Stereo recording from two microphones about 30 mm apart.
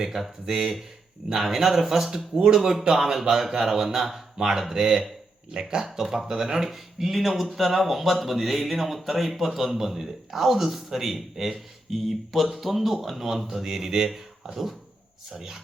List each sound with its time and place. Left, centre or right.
0.0 s a man's voice: centre
0.4 s a man's voice: centre
6.0 s a man's voice: centre
14.5 s a man's voice: centre